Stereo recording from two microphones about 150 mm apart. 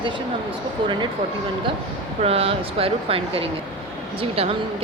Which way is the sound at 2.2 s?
40° right (ahead or behind).